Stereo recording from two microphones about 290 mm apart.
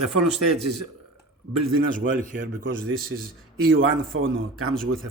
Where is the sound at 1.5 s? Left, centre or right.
Right.